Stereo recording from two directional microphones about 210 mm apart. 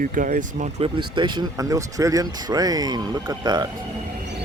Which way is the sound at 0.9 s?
20° right (ahead or behind).